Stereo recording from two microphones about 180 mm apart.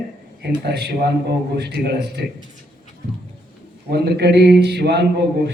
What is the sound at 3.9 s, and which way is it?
A man's voice, 65° right (ahead or behind).